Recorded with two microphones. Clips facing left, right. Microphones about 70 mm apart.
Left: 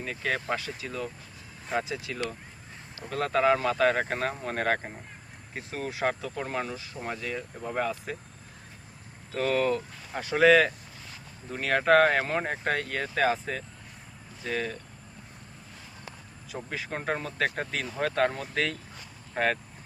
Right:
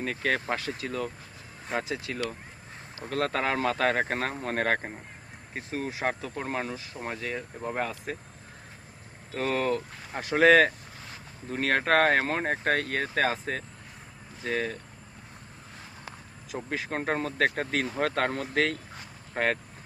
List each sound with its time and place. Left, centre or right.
0.0 s speech: right
1.7 s speech: right
3.1 s speech: right
5.5 s speech: right
9.3 s speech: right
16.6 s speech: right